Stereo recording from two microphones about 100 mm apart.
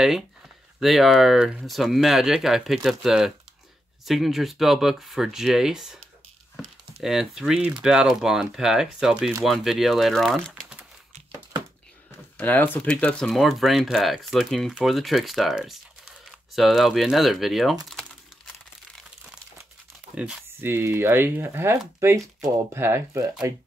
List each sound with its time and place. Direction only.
0.7 s speech: centre (ahead or behind)
12.4 s speech: 20° left (ahead or behind)
13.3 s speech: centre (ahead or behind)
20.2 s speech: 10° right (ahead or behind)
20.7 s speech: 25° right (ahead or behind)